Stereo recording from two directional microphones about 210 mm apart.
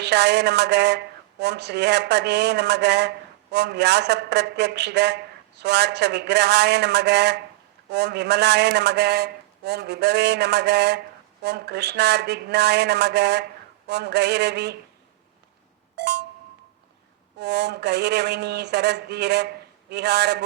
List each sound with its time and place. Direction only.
0.0 s a man's voice: 55° right (ahead or behind)
16.0 s a sound: 55° right (ahead or behind)
17.3 s a man's voice: 55° right (ahead or behind)